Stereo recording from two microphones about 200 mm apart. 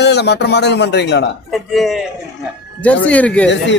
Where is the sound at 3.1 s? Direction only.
5° left (ahead or behind).